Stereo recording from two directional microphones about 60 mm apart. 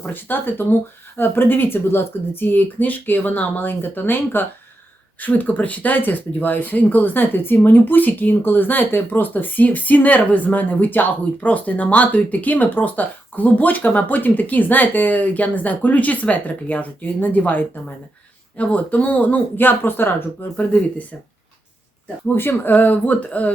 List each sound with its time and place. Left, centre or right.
0.0 s speech: left
22.4 s speech: left